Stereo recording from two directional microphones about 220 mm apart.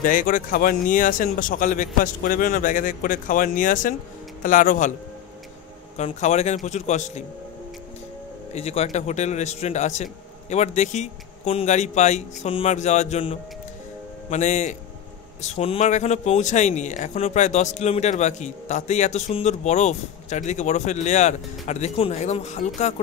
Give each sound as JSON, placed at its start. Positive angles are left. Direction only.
{"t": 0.0, "sound": "speech", "side_deg": 35}
{"t": 5.9, "sound": "speech", "side_deg": 30}
{"t": 8.5, "sound": "speech", "side_deg": 30}